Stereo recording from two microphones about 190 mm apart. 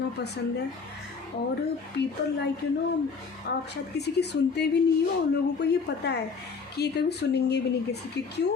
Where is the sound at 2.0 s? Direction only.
65° left (ahead or behind).